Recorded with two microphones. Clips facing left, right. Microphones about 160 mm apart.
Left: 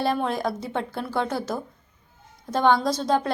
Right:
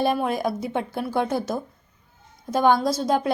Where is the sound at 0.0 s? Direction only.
15° right (ahead or behind).